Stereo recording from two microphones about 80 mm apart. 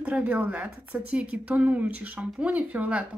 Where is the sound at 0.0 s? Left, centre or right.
Centre.